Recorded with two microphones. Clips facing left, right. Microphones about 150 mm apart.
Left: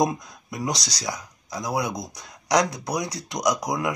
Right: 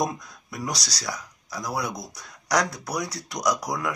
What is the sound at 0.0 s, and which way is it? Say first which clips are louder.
Speech: left 4 dB; 20° left (ahead or behind).